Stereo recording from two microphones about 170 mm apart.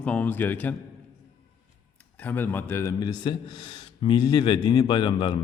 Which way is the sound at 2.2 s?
10° left (ahead or behind).